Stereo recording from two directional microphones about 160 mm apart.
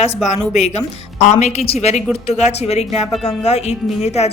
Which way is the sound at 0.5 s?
45° left (ahead or behind).